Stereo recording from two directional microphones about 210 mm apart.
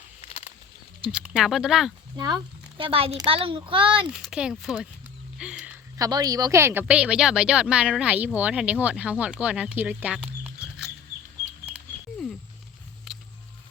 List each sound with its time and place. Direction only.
0.2 s a sound: 30° left (ahead or behind)
1.1 s speech: 5° right (ahead or behind)
2.1 s a child's voice: 20° right (ahead or behind)
4.2 s speech: 5° right (ahead or behind)
6.0 s speech: 20° right (ahead or behind)
13.1 s a sound: centre (ahead or behind)